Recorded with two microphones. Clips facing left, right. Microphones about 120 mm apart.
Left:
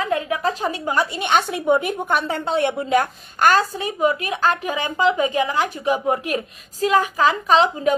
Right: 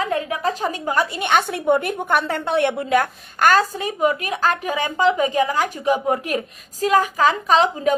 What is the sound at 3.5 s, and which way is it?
A woman's voice, 40° right (ahead or behind).